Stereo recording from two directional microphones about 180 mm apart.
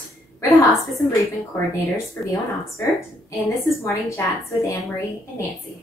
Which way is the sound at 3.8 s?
15° left (ahead or behind).